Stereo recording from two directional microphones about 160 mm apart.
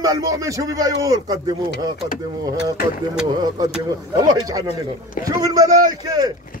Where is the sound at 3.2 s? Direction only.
25° right (ahead or behind).